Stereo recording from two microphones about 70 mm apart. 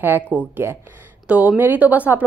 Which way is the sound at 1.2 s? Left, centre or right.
Right.